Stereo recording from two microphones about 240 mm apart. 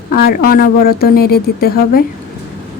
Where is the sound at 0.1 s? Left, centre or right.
Left.